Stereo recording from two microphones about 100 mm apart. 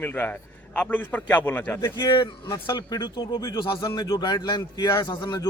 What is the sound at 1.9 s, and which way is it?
Speech, 50° left (ahead or behind).